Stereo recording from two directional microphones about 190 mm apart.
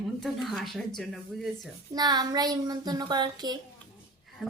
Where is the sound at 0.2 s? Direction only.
Centre (ahead or behind).